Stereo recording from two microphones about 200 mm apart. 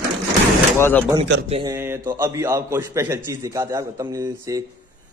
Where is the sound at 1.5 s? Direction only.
20° right (ahead or behind).